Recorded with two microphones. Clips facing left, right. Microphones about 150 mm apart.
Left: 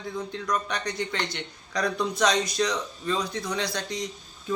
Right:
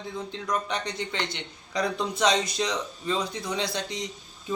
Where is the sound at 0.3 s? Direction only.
25° right (ahead or behind).